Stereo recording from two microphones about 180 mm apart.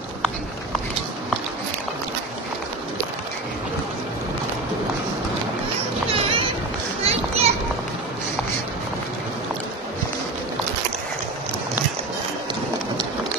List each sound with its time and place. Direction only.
6.1 s run: 30° right (ahead or behind)
7.1 s children playing: 35° right (ahead or behind)